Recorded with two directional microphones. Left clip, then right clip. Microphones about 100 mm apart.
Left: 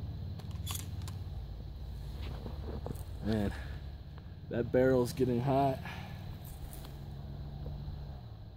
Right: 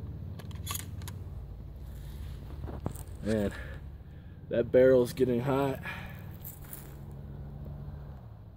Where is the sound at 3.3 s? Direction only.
20° left (ahead or behind).